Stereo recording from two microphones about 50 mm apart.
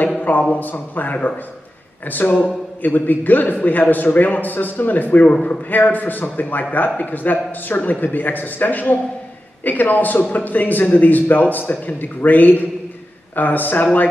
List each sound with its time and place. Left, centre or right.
0.2 s a man's voice: left
5.2 s a man's voice: left
5.7 s a man's voice: left